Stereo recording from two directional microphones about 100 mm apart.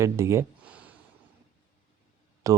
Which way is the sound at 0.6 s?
15° right (ahead or behind).